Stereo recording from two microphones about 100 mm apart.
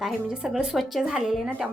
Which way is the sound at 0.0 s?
5° right (ahead or behind).